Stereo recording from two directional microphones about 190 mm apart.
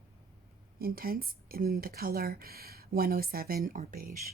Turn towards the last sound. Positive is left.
turn(degrees=-45)  # may be behind; listen again after turning